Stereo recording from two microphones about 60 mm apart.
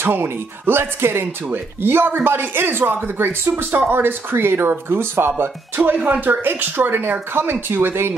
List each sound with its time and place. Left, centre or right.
0.0 s speech: right
6.0 s speech: right